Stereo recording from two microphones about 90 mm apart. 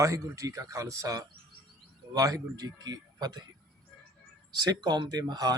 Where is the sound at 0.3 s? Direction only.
40° right (ahead or behind).